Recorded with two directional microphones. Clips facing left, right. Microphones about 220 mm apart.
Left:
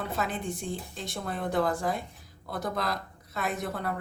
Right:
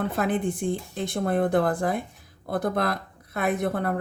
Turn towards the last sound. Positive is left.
turn(degrees=-55)  # may be behind; listen again after turning